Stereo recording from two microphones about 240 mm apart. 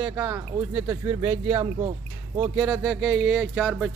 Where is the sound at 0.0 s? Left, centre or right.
Centre.